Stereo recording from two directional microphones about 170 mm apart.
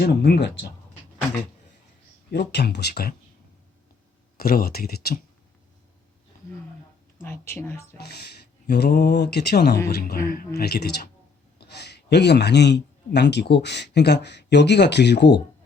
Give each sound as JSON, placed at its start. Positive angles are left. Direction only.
{"t": 0.0, "sound": "speech", "side_deg": 70}
{"t": 2.3, "sound": "speech", "side_deg": 75}
{"t": 4.4, "sound": "speech", "side_deg": 60}
{"t": 7.2, "sound": "speech", "side_deg": 15}
{"t": 7.9, "sound": "a man's voice", "side_deg": 70}